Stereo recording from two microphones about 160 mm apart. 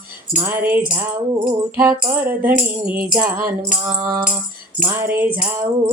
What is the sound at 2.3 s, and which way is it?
Music, 10° right (ahead or behind).